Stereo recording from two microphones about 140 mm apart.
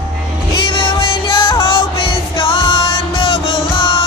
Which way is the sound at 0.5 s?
35° left (ahead or behind).